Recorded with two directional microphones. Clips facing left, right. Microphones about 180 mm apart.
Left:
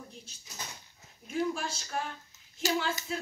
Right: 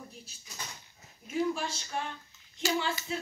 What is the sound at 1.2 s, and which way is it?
Speech, centre (ahead or behind).